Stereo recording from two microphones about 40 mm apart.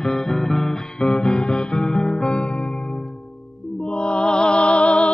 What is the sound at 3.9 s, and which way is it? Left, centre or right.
Music, left.